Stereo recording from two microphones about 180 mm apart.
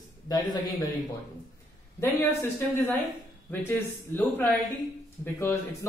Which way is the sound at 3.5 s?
10° left (ahead or behind).